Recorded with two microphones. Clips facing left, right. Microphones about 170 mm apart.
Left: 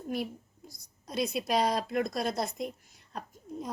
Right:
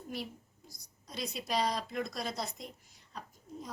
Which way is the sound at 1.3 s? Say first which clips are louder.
Left 4 dB; 60° left (ahead or behind).